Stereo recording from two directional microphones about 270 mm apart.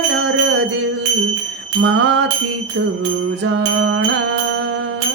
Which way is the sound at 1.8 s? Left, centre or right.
Right.